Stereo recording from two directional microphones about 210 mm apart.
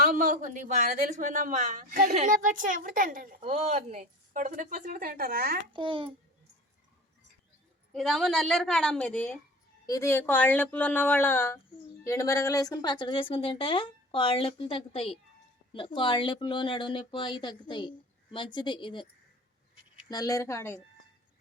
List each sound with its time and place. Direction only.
0.0 s a woman's voice: 40° right (ahead or behind)
5.7 s a child's voice: 25° right (ahead or behind)
7.9 s a woman's voice: centre (ahead or behind); by 19.0 s 25° left (ahead or behind)
20.1 s speech: 15° left (ahead or behind)